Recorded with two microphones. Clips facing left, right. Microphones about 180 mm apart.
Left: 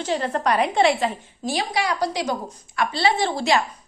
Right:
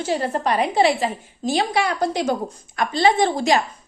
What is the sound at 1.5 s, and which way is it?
A woman's voice, 55° right (ahead or behind).